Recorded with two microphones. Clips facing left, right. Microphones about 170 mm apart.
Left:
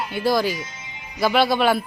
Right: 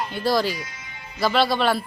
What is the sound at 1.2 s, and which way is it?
Speech, 5° left (ahead or behind).